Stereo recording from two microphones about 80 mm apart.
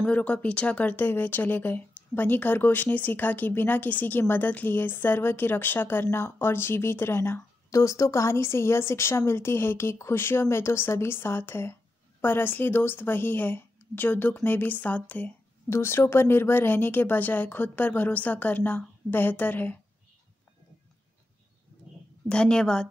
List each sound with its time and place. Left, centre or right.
0.0 s speech: centre
7.7 s a woman's voice: left
22.3 s a woman's voice: centre